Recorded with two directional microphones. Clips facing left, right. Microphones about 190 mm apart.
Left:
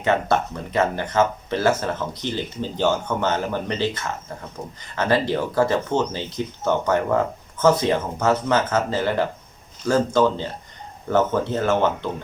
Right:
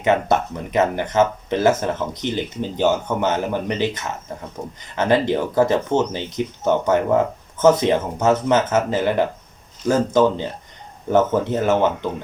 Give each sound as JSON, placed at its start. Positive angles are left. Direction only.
{"t": 0.0, "sound": "speech", "side_deg": -15}